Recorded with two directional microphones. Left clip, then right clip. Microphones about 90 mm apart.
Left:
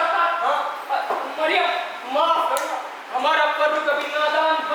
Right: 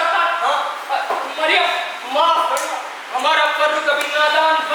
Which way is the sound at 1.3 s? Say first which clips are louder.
Right 4 dB; 15° left (ahead or behind).